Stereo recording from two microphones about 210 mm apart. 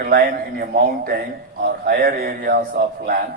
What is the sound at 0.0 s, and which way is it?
A man's voice, 45° right (ahead or behind).